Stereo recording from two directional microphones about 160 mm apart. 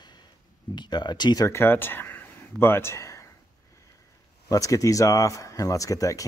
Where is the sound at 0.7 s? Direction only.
25° left (ahead or behind).